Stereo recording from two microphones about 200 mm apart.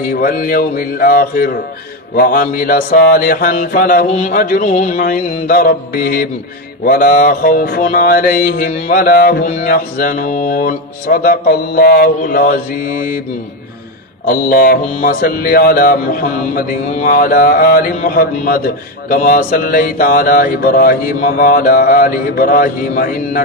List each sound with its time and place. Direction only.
0.0 s music: 45° left (ahead or behind)
14.2 s music: 45° left (ahead or behind)